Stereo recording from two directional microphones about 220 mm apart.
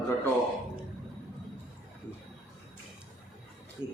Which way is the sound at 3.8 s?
25° left (ahead or behind).